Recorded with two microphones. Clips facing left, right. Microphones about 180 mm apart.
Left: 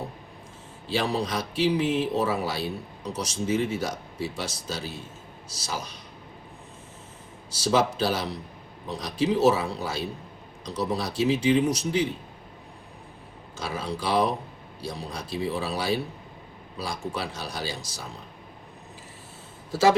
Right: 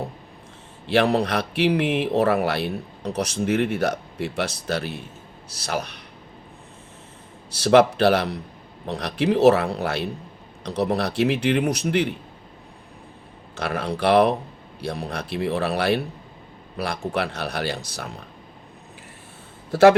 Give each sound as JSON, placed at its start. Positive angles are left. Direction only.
{"t": 0.9, "sound": "speech", "side_deg": -65}
{"t": 7.5, "sound": "speech", "side_deg": -65}
{"t": 13.6, "sound": "speech", "side_deg": -65}
{"t": 19.7, "sound": "speech", "side_deg": -65}